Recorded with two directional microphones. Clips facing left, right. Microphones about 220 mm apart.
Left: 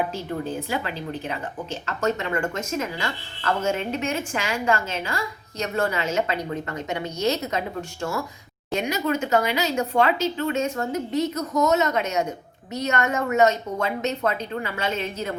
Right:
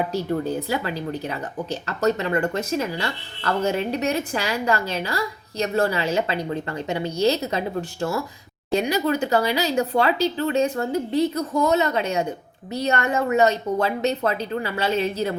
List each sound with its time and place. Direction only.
1.7 s a woman's voice: 35° right (ahead or behind)